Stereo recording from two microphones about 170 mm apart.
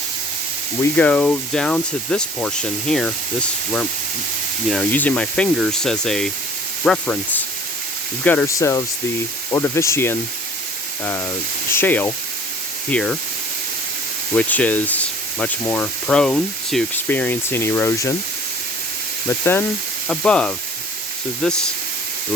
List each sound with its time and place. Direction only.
0.8 s speech: 10° left (ahead or behind)
4.7 s speech: 5° left (ahead or behind)
11.7 s speech: 10° left (ahead or behind)
14.3 s speech: 10° left (ahead or behind)
20.1 s speech: 5° left (ahead or behind)